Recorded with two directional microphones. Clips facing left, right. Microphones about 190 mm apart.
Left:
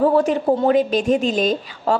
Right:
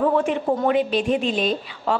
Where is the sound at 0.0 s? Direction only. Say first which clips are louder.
Left 4 dB; 35° left (ahead or behind).